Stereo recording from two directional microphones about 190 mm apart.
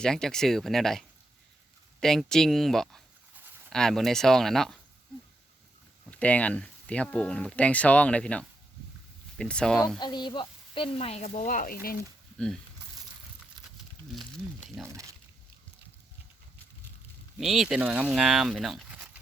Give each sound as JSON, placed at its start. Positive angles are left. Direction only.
{"t": 0.0, "sound": "speech", "side_deg": 5}
{"t": 6.1, "sound": "speech", "side_deg": 5}
{"t": 10.0, "sound": "speech", "side_deg": 25}
{"t": 14.8, "sound": "speech", "side_deg": -5}
{"t": 17.3, "sound": "speech", "side_deg": 0}